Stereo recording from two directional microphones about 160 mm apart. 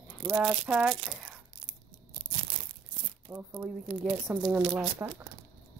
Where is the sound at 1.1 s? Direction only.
5° right (ahead or behind).